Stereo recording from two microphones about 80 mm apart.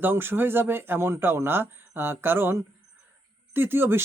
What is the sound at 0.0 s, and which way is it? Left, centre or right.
A man's voice, right.